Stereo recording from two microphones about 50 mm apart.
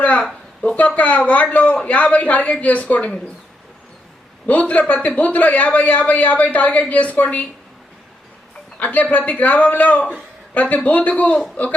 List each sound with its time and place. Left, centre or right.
0.0 s a sound: left
0.8 s speech: left
4.6 s speech: left
8.8 s a man's voice: left